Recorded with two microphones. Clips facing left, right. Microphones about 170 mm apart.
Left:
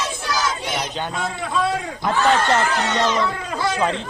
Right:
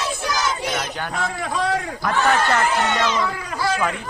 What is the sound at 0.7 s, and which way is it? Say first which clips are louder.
Speech: left 1 dB; 25° left (ahead or behind).